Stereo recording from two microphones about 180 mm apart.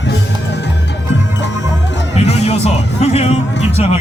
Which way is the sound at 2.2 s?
35° left (ahead or behind).